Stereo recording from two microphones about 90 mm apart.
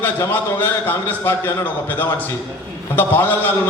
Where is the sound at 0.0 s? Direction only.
20° left (ahead or behind).